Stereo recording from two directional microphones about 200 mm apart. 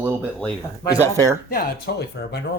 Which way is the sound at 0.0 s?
15° right (ahead or behind).